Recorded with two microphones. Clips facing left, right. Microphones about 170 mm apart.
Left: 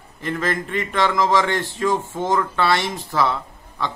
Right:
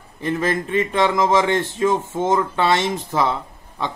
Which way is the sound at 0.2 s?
20° right (ahead or behind).